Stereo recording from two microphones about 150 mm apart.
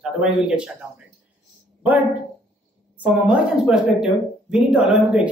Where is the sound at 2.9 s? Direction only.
10° right (ahead or behind).